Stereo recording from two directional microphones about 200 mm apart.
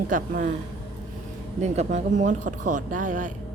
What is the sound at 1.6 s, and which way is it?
Speech, 35° right (ahead or behind).